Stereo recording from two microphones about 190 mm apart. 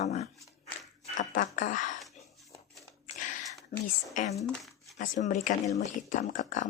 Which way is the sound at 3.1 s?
40° left (ahead or behind).